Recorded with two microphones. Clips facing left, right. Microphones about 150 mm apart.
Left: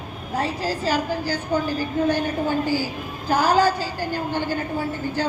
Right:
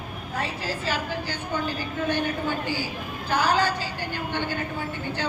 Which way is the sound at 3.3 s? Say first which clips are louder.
Left 5 dB; 40° left (ahead or behind).